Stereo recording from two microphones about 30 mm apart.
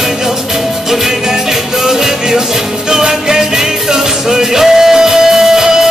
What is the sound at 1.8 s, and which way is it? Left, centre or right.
Music, centre.